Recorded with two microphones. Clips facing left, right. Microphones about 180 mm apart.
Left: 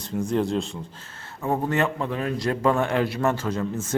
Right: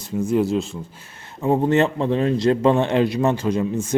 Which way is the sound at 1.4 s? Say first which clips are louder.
Right 6 dB; 20° right (ahead or behind).